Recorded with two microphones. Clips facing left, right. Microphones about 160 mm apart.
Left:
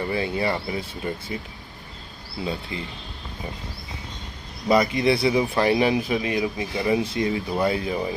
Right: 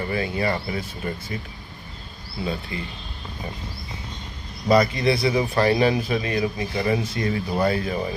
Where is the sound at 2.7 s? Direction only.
25° left (ahead or behind).